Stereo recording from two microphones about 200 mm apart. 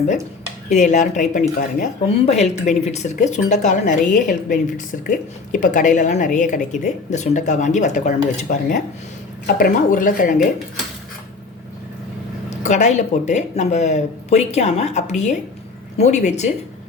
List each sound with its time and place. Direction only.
0.7 s a woman's voice: 35° left (ahead or behind)
12.6 s speech: 35° left (ahead or behind)